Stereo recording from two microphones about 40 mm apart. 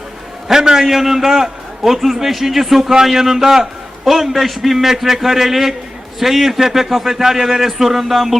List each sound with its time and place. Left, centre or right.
0.4 s a man's voice: centre